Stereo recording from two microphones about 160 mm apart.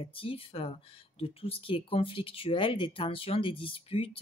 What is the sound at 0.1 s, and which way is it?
Speech, 35° left (ahead or behind).